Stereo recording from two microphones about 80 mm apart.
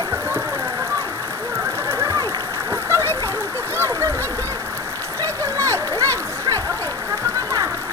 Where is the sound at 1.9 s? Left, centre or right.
Right.